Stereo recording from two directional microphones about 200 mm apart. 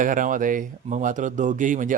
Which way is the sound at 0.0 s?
40° right (ahead or behind).